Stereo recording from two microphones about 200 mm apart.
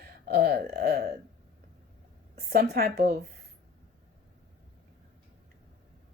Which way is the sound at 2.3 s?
50° right (ahead or behind).